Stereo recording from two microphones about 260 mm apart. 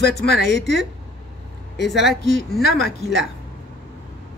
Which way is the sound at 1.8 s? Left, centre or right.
Centre.